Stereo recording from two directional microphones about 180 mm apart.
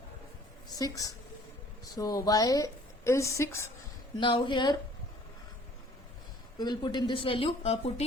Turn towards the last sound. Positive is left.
turn(degrees=30)  # may be behind; listen again after turning